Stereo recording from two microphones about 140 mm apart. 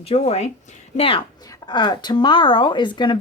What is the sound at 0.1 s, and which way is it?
A woman's voice, 50° left (ahead or behind).